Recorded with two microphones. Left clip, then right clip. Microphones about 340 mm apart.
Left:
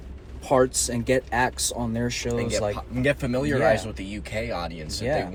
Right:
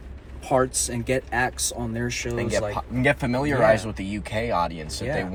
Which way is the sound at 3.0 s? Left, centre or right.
Centre.